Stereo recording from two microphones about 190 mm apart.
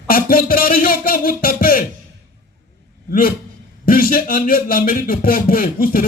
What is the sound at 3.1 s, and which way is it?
A man's voice, 50° left (ahead or behind).